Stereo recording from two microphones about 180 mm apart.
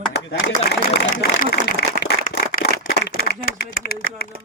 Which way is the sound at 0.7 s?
65° left (ahead or behind).